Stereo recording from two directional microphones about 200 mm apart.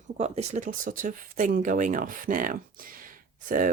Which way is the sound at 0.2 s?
35° right (ahead or behind).